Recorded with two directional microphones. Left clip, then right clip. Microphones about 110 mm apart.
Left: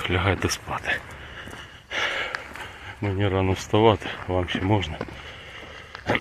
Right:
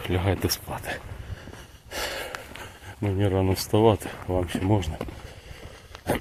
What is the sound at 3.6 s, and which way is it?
Speech, 35° right (ahead or behind).